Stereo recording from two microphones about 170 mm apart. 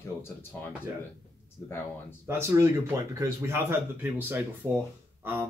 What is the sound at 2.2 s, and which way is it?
Speech, 15° right (ahead or behind).